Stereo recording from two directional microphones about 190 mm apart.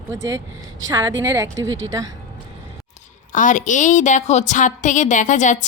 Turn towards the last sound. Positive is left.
turn(degrees=40)  # may be behind; listen again after turning